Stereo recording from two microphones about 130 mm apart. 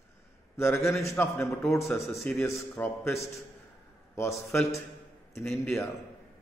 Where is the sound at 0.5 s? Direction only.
20° left (ahead or behind).